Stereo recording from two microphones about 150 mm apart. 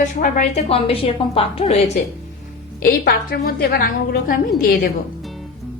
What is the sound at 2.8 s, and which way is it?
A woman's voice, 90° left.